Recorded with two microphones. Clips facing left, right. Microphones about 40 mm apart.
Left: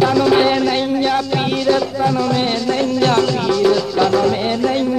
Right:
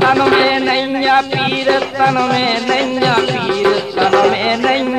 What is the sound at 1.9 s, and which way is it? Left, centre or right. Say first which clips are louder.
Music: right 4 dB; right.